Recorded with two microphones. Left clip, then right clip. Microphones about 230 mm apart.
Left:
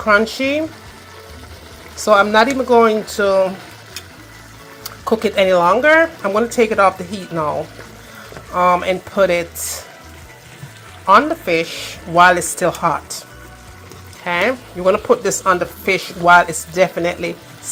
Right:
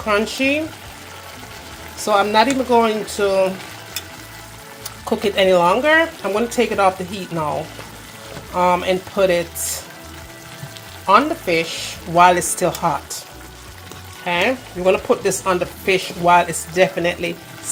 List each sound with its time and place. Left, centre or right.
0.0 s speech: centre
2.0 s speech: centre
4.8 s speech: centre
8.5 s speech: centre
11.0 s speech: centre
14.3 s speech: centre